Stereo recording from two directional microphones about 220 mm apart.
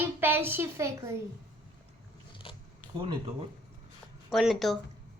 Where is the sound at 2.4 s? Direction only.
25° left (ahead or behind).